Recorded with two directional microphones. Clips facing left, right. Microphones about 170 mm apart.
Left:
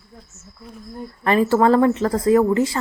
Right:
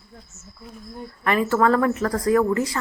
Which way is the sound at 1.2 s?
30° left (ahead or behind).